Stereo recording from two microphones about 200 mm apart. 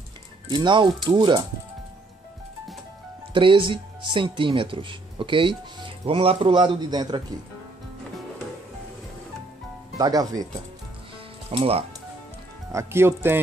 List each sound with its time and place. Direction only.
0.5 s speech: 25° right (ahead or behind)
3.3 s speech: 25° right (ahead or behind)
9.9 s speech: 20° right (ahead or behind)
11.5 s speech: 30° right (ahead or behind)
12.7 s speech: 10° right (ahead or behind)